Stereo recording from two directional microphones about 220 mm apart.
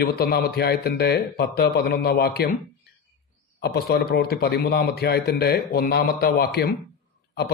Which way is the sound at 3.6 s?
45° left (ahead or behind).